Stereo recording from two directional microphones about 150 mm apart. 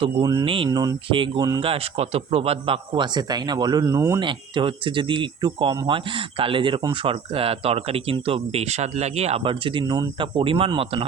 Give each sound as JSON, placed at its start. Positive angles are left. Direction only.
{"t": 0.0, "sound": "speech", "side_deg": -25}
{"t": 0.4, "sound": "speech", "side_deg": -35}
{"t": 4.2, "sound": "speech", "side_deg": -35}